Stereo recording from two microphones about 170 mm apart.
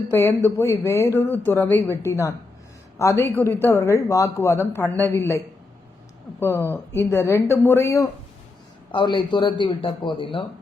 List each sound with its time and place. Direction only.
0.1 s speech: 15° left (ahead or behind)
6.4 s a man's voice: 15° left (ahead or behind); by 10.4 s 30° left (ahead or behind)